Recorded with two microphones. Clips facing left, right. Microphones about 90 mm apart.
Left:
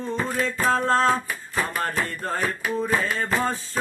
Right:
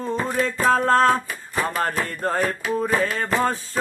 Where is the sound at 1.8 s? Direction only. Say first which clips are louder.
Right 3 dB; 40° right (ahead or behind).